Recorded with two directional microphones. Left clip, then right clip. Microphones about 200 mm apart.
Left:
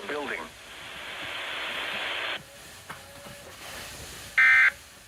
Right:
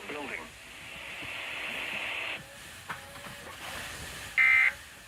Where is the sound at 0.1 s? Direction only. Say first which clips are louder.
Left 6 dB; 30° left (ahead or behind).